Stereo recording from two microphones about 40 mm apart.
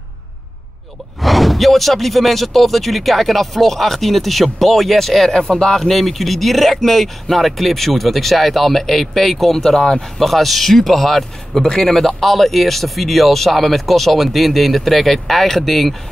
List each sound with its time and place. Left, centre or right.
1.2 s speech: centre
5.3 s speech: centre
5.8 s speech: centre